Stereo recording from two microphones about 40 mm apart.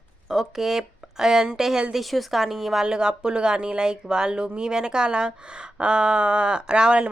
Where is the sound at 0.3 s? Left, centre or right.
Centre.